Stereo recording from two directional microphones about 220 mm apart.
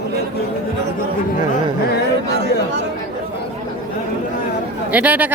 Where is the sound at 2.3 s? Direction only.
50° right (ahead or behind).